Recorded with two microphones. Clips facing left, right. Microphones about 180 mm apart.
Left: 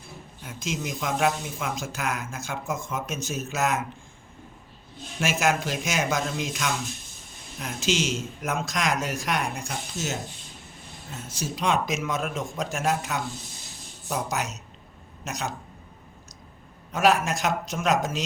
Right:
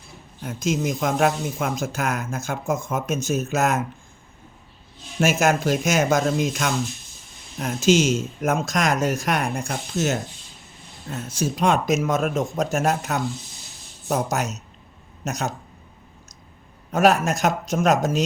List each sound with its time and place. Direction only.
0.4 s speech: 45° right (ahead or behind)
5.2 s speech: 45° right (ahead or behind)
16.9 s speech: 45° right (ahead or behind)